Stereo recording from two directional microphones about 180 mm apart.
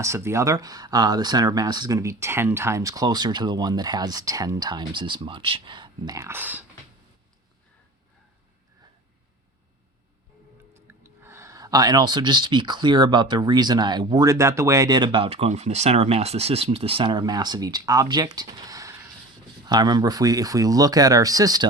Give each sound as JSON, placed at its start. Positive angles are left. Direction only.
{"t": 0.0, "sound": "speech", "side_deg": -15}
{"t": 10.8, "sound": "speech", "side_deg": -15}